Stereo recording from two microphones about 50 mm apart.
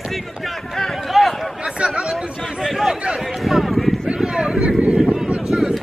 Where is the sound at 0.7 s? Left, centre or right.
Centre.